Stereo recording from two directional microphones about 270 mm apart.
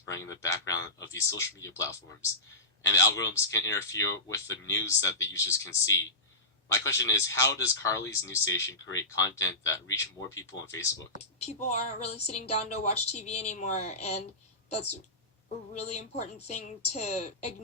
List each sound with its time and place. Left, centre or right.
0.1 s speech: centre
11.3 s a woman's voice: left
15.7 s a woman's voice: left